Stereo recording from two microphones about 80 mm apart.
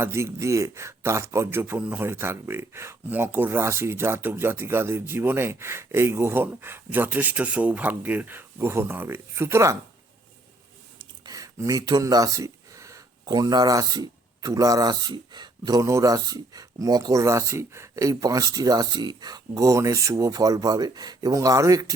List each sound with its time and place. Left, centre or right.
0.0 s a man's voice: right
11.3 s a sound: right
13.2 s speech: right
15.8 s speech: right